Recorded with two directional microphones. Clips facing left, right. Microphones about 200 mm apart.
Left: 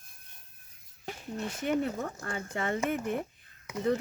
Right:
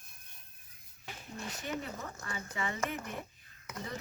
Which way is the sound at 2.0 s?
50° left (ahead or behind).